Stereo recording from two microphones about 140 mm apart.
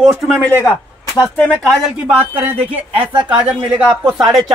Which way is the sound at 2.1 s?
15° right (ahead or behind).